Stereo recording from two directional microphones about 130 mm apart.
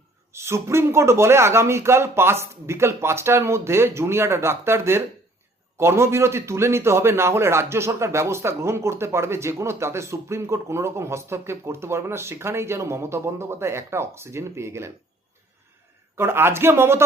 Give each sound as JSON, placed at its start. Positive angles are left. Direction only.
{"t": 0.3, "sound": "speech", "side_deg": -20}
{"t": 16.1, "sound": "speech", "side_deg": -20}